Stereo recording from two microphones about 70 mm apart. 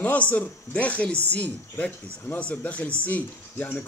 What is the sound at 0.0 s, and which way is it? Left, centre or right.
Speech, left.